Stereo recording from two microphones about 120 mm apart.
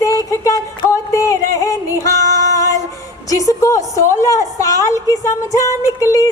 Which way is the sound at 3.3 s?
25° left (ahead or behind).